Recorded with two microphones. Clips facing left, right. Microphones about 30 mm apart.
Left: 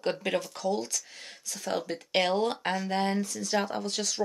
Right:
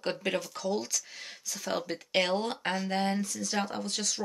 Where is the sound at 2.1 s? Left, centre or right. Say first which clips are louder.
Left 2 dB; centre.